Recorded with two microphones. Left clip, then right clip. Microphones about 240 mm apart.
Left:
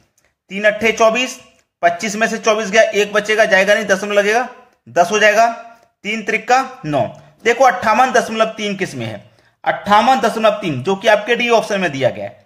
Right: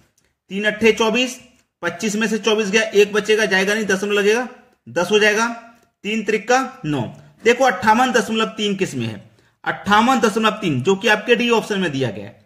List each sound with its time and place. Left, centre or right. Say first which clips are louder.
0.5 s a man's voice: left 2 dB; centre